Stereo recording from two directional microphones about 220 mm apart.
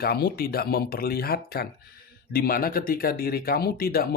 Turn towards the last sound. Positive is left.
turn(degrees=45)  # may be behind; listen again after turning